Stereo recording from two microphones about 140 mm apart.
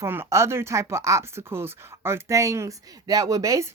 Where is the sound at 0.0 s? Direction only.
20° right (ahead or behind).